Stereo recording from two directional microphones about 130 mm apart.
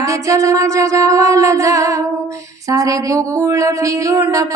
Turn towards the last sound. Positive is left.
turn(degrees=-25)  # may be behind; listen again after turning